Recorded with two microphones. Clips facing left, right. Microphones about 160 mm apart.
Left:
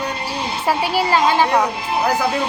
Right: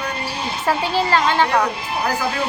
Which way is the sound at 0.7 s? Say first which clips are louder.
Left 1 dB; 10° left (ahead or behind).